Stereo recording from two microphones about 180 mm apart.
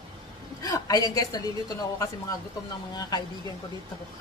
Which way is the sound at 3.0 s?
20° left (ahead or behind).